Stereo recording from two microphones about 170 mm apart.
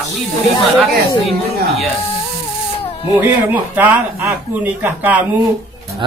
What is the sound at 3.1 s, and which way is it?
Speech, 10° right (ahead or behind).